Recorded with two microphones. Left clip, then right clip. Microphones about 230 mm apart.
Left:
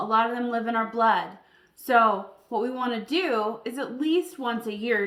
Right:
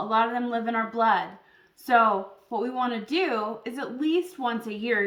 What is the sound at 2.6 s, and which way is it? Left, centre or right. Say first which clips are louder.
Speech: right 3 dB; centre.